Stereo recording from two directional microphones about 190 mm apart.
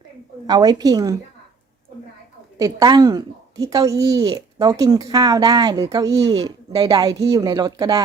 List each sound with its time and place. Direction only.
0.4 s a woman's voice: 20° right (ahead or behind)
2.6 s a woman's voice: 20° right (ahead or behind)